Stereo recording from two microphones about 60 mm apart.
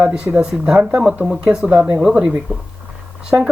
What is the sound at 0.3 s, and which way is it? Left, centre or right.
Speech, centre.